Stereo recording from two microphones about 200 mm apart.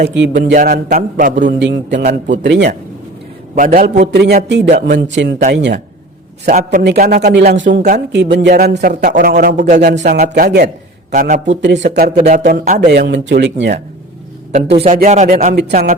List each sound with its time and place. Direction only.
0.0 s speech: 60° right (ahead or behind)
0.5 s a man's voice: 45° right (ahead or behind)
1.5 s speech: 60° right (ahead or behind)
2.0 s speech: 40° right (ahead or behind)
2.4 s speech: 60° right (ahead or behind)
3.5 s a man's voice: 40° right (ahead or behind); by 5.8 s 60° right (ahead or behind)
6.4 s speech: 40° right (ahead or behind)
6.8 s a man's voice: 55° right (ahead or behind)
9.7 s speech: 55° right (ahead or behind)
10.0 s a man's voice: 40° right (ahead or behind)
11.1 s a man's voice: 40° right (ahead or behind)
11.4 s speech: 60° right (ahead or behind); by 12.9 s 40° right (ahead or behind)
12.9 s speech: 60° right (ahead or behind)
14.8 s speech: 40° right (ahead or behind)